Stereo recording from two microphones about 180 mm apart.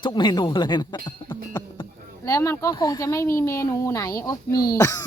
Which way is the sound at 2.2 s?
15° left (ahead or behind).